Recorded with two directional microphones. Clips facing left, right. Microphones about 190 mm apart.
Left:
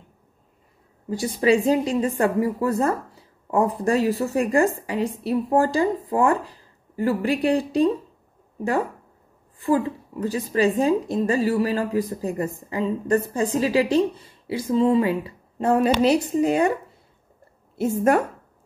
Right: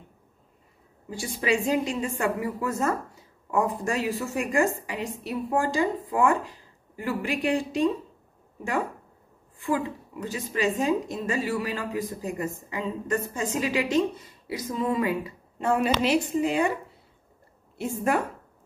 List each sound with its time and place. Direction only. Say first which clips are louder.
1.1 s a woman's voice: left 7 dB; 40° left (ahead or behind)
9.6 s a woman's voice: left 6 dB; 35° left (ahead or behind)
17.7 s a woman's voice: left 7 dB; 40° left (ahead or behind)